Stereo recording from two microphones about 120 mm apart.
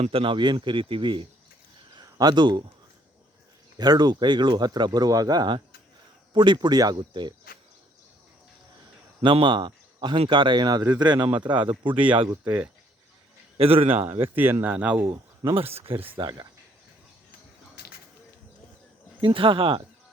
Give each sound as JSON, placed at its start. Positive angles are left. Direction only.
{"t": 0.0, "sound": "speech", "side_deg": -50}
{"t": 3.8, "sound": "speech", "side_deg": -35}
{"t": 9.2, "sound": "speech", "side_deg": -45}
{"t": 12.5, "sound": "speech", "side_deg": -10}
{"t": 13.6, "sound": "speech", "side_deg": -55}
{"t": 13.9, "sound": "speech", "side_deg": -20}
{"t": 15.5, "sound": "speech", "side_deg": -55}
{"t": 19.2, "sound": "speech", "side_deg": -45}